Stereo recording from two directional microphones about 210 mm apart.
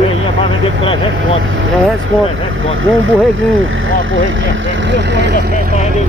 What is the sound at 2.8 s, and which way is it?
Speech, 70° right (ahead or behind).